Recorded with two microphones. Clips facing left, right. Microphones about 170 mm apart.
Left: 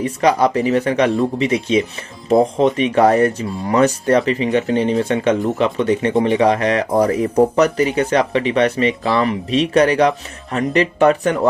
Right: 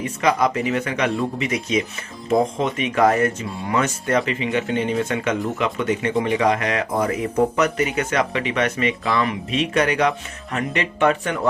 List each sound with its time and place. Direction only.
0.0 s speech: 35° left (ahead or behind)